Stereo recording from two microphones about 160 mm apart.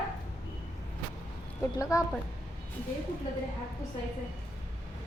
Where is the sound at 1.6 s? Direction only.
20° left (ahead or behind).